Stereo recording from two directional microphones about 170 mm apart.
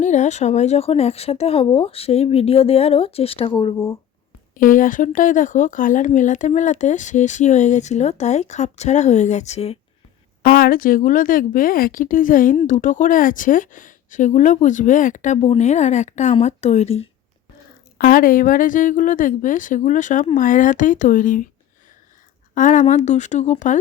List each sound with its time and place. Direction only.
0.0 s speech: 45° left (ahead or behind); by 3.8 s 25° left (ahead or behind)
4.5 s speech: 55° left (ahead or behind)
10.4 s speech: 60° left (ahead or behind); by 17.1 s 35° left (ahead or behind)
17.9 s speech: 55° left (ahead or behind)
22.5 s speech: 50° left (ahead or behind)